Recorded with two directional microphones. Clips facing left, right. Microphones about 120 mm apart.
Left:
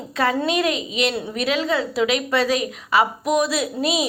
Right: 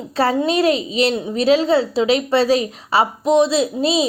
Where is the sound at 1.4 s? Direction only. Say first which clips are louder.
Right 8 dB; 30° right (ahead or behind).